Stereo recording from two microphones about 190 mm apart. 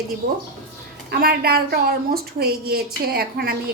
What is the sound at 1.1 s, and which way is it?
A woman's voice, 50° right (ahead or behind).